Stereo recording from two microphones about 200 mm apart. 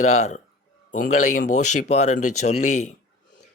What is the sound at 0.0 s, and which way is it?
Speech, 35° left (ahead or behind).